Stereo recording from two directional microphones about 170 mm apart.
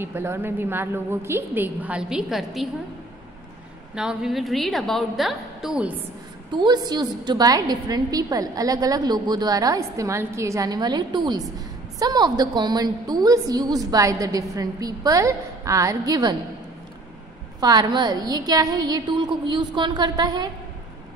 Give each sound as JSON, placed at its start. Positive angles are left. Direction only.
{"t": 0.0, "sound": "a woman's voice", "side_deg": -15}
{"t": 3.9, "sound": "a woman's voice", "side_deg": -5}
{"t": 6.5, "sound": "a woman's voice", "side_deg": -25}
{"t": 17.6, "sound": "a woman's voice", "side_deg": -25}